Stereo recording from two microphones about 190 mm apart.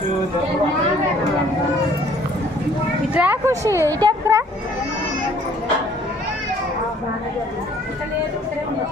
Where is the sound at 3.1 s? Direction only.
10° right (ahead or behind).